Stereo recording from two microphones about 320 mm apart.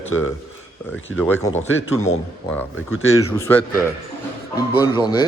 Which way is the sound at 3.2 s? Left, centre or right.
Centre.